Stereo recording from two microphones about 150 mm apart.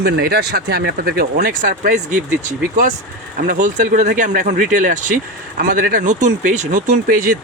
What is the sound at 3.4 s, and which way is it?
Speech, 65° right (ahead or behind).